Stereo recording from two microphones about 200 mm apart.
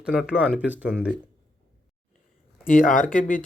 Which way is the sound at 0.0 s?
5° right (ahead or behind).